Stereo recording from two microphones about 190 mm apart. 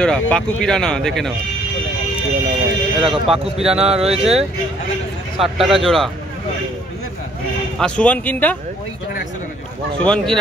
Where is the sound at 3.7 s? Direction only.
30° right (ahead or behind).